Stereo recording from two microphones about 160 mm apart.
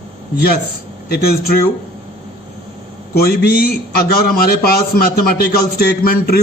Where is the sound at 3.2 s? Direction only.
75° left (ahead or behind).